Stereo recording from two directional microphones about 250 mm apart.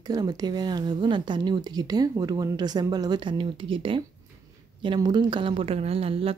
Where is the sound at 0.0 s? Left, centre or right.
Centre.